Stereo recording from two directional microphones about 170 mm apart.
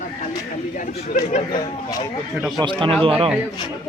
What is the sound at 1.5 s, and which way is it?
Speech, 20° left (ahead or behind).